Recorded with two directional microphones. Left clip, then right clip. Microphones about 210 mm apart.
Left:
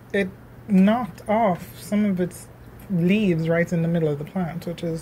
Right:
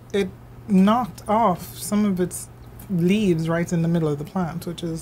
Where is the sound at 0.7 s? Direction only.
20° right (ahead or behind).